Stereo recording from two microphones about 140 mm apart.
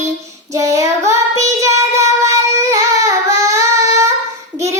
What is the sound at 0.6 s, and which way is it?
Child singing, 20° right (ahead or behind).